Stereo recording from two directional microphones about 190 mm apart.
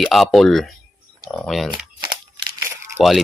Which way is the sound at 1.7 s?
25° right (ahead or behind).